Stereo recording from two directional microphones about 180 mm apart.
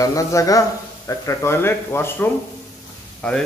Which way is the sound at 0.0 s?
20° left (ahead or behind).